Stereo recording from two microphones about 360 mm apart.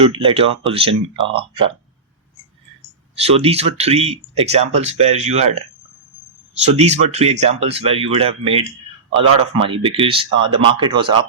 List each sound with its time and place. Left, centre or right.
0.0 s speech: centre
3.2 s speech: centre
6.6 s speech: centre